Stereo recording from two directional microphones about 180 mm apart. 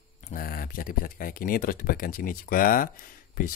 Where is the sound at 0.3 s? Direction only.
55° left (ahead or behind).